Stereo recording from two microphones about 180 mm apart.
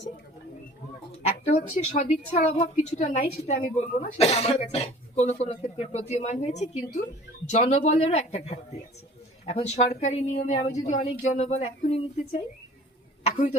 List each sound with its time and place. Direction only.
1.5 s a woman's voice: 40° left (ahead or behind)
13.2 s a man's voice: 35° left (ahead or behind)